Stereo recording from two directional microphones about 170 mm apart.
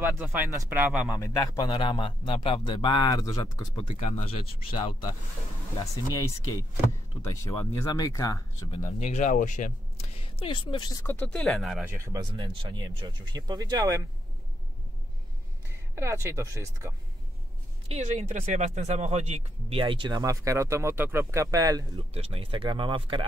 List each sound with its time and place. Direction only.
0.0 s speech: 10° right (ahead or behind)
1.2 s a man's voice: 20° left (ahead or behind)
3.7 s speech: 35° left (ahead or behind)
6.1 s a man's voice: 20° left (ahead or behind)
9.0 s speech: 45° left (ahead or behind)
10.2 s a man's voice: 30° left (ahead or behind); by 11.8 s centre (ahead or behind)
11.8 s speech: 20° right (ahead or behind)
15.7 s speech: 15° right (ahead or behind)
17.8 s speech: 40° right (ahead or behind); by 22.0 s 20° right (ahead or behind)
22.1 s speech: 35° right (ahead or behind)